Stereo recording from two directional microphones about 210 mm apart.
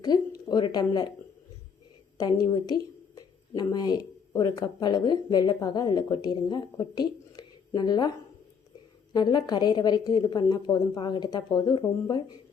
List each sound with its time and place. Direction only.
0.4 s a woman's voice: 20° left (ahead or behind)
2.1 s speech: 20° left (ahead or behind)
9.1 s a woman's voice: 20° left (ahead or behind)